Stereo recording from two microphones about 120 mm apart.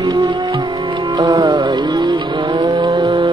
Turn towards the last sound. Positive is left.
turn(degrees=-45)  # may be behind; listen again after turning